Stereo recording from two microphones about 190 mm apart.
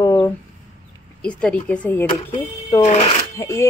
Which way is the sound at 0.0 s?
20° left (ahead or behind).